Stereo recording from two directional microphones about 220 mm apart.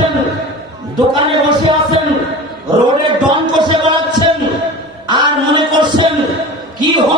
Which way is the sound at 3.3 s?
20° right (ahead or behind).